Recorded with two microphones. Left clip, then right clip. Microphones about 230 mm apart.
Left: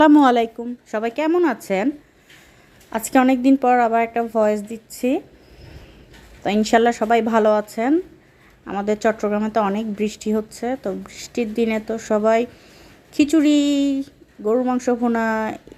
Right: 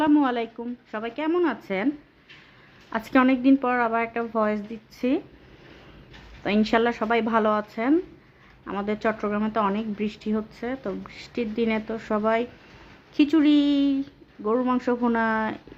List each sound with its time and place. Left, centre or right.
0.0 s a woman's voice: left
2.9 s a woman's voice: centre
6.4 s a woman's voice: centre